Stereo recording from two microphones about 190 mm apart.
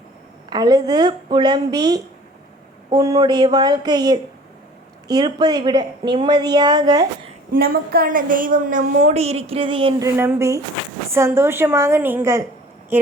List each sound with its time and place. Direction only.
0.5 s a woman's voice: 20° right (ahead or behind)
7.5 s a woman's voice: 50° right (ahead or behind); by 10.1 s 25° right (ahead or behind)
10.2 s a woman's voice: 15° right (ahead or behind)